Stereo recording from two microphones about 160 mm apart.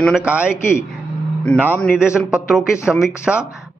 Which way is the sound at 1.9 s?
5° right (ahead or behind).